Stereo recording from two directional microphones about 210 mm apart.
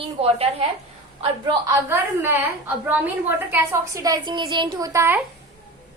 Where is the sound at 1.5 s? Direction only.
15° right (ahead or behind).